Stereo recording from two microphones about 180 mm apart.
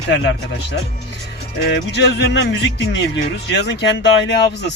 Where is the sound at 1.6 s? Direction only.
70° left (ahead or behind).